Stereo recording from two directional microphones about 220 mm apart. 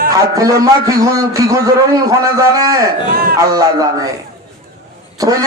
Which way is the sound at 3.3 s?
15° right (ahead or behind).